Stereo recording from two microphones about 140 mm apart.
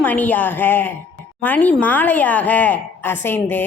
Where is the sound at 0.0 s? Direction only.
10° left (ahead or behind).